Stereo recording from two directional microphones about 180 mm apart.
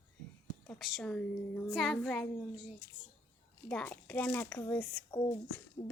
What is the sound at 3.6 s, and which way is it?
Speech, 10° left (ahead or behind).